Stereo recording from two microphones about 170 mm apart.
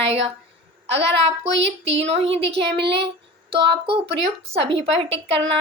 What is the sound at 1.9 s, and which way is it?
Speech, 35° right (ahead or behind).